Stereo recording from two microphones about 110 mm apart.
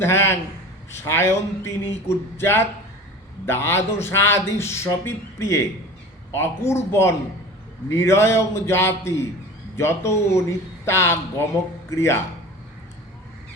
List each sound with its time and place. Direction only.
0.0 s a man's voice: 20° left (ahead or behind)